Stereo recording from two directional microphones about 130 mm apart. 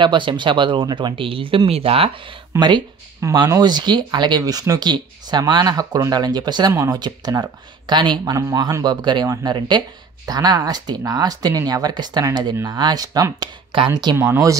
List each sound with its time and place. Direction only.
0.0 s speech: 40° right (ahead or behind)
2.6 s speech: 35° right (ahead or behind)
14.1 s speech: 20° right (ahead or behind)